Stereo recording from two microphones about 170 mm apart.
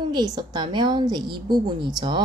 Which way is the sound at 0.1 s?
25° right (ahead or behind).